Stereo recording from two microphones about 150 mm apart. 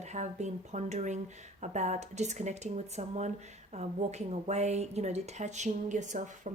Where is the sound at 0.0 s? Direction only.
50° right (ahead or behind).